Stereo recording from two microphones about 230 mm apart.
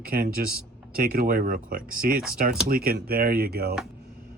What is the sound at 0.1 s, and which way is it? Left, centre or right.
Speech, right.